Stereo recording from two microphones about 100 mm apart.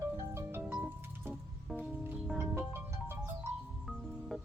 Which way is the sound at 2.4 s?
25° right (ahead or behind).